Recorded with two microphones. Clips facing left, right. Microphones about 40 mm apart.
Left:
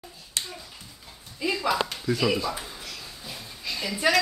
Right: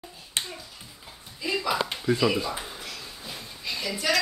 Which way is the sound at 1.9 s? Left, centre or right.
Right.